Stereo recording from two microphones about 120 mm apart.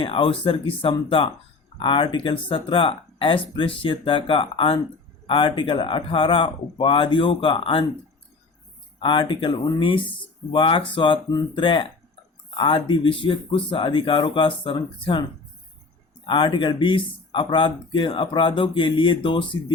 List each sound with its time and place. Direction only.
0.0 s speech: 50° left (ahead or behind)
9.0 s speech: 45° left (ahead or behind)
16.2 s speech: 40° left (ahead or behind)